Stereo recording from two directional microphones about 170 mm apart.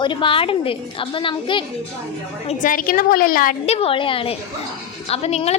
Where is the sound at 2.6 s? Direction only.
55° left (ahead or behind).